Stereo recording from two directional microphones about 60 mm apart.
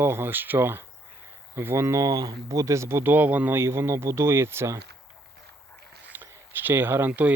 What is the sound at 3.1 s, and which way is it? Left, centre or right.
Speech, right.